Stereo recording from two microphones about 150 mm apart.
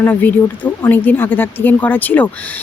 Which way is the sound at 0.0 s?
10° left (ahead or behind).